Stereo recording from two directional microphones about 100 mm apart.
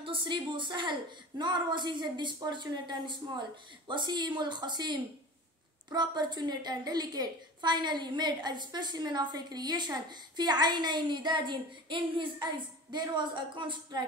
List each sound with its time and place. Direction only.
0.0 s a woman's voice: 55° right (ahead or behind)